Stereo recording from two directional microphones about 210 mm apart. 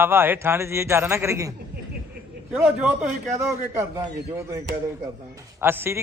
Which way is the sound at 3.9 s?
15° right (ahead or behind).